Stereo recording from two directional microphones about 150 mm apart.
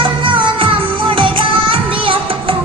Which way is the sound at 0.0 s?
35° right (ahead or behind).